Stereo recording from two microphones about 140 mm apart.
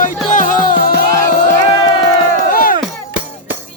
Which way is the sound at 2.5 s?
90° left.